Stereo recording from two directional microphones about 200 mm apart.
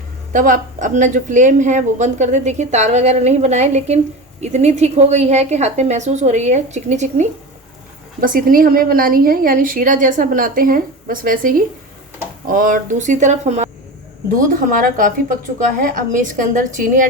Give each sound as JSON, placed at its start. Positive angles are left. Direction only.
{"t": 0.3, "sound": "a woman's voice", "side_deg": -40}
{"t": 14.8, "sound": "a woman's voice", "side_deg": -40}